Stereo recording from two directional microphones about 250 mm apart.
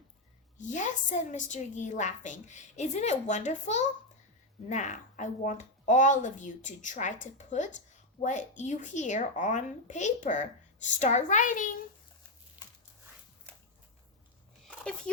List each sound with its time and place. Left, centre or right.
0.7 s a woman's voice: left
15.1 s speech: centre